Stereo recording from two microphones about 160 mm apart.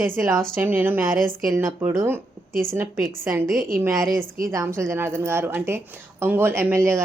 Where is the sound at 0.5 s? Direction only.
15° right (ahead or behind).